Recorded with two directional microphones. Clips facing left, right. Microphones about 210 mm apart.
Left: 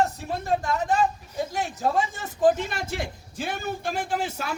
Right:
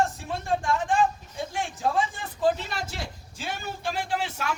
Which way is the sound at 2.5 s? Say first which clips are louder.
Left 5 dB; 55° left (ahead or behind).